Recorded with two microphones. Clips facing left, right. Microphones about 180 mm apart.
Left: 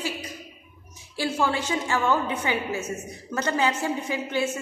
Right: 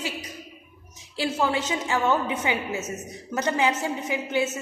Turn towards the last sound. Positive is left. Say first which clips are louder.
# right 1 dB
turn(degrees=-20)  # may be behind; listen again after turning